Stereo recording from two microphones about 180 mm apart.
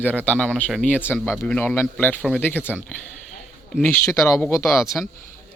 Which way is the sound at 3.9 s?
15° left (ahead or behind).